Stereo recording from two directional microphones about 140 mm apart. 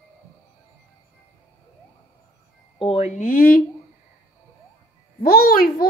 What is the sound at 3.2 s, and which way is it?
Speech, 85° left.